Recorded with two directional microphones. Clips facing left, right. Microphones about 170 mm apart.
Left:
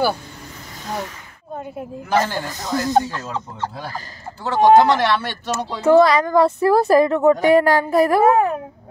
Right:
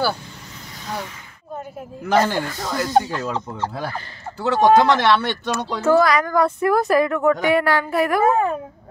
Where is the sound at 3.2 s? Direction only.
60° right (ahead or behind).